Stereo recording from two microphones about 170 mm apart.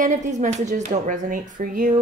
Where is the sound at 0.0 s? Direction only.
45° right (ahead or behind).